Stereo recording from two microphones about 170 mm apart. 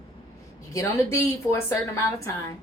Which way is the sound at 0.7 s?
15° left (ahead or behind).